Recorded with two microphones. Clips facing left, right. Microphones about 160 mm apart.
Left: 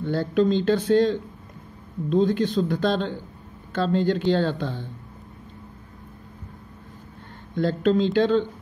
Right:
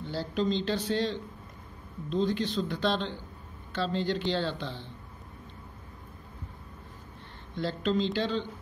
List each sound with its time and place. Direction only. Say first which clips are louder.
0.0 s speech: left 9 dB; 55° left (ahead or behind)
7.5 s speech: left 8 dB; 50° left (ahead or behind)